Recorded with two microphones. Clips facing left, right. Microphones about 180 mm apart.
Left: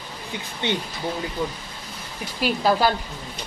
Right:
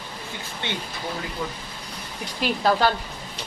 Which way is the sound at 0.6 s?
20° left (ahead or behind).